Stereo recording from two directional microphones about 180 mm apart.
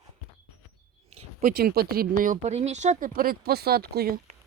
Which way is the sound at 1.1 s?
35° right (ahead or behind).